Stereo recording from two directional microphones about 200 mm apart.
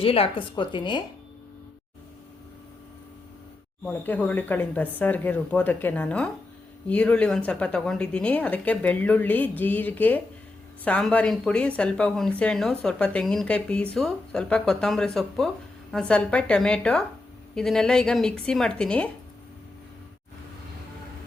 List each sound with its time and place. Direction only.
0.0 s a woman's voice: 30° left (ahead or behind)
3.8 s speech: 10° left (ahead or behind)